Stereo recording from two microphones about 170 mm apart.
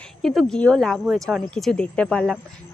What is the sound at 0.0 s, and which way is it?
Speech, 5° left (ahead or behind).